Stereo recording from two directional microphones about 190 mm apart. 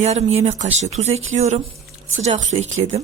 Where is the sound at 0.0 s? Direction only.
35° right (ahead or behind).